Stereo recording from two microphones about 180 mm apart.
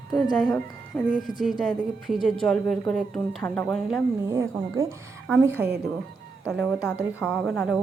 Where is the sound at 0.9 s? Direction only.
5° left (ahead or behind).